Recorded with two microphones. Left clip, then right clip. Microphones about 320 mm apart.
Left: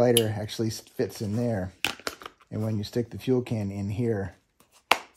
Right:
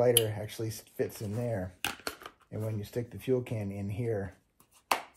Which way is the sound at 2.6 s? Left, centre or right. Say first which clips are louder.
Left 7 dB; left.